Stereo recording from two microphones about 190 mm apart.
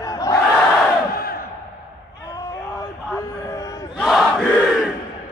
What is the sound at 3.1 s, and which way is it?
Music, 15° left (ahead or behind).